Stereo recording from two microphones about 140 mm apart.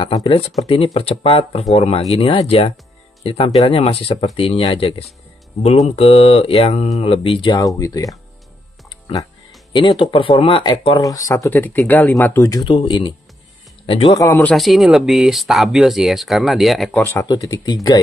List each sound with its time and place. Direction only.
0.0 s speech: 40° left (ahead or behind)
7.6 s speech: 25° left (ahead or behind)
9.7 s speech: 35° left (ahead or behind)
11.0 s speech: 25° left (ahead or behind)
12.6 s speech: 35° left (ahead or behind)
14.1 s speech: 25° left (ahead or behind)
14.4 s speech: centre (ahead or behind)
17.0 s speech: 15° left (ahead or behind)